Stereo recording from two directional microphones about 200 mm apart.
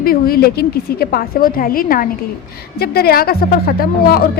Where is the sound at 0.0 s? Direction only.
50° left (ahead or behind).